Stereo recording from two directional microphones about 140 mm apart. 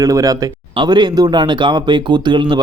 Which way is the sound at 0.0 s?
25° right (ahead or behind).